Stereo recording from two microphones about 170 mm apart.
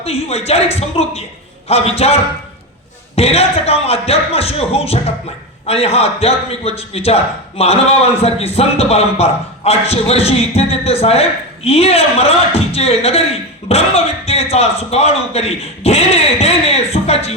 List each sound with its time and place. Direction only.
0.0 s a man's voice: 35° left (ahead or behind)
3.2 s a man's voice: 35° left (ahead or behind)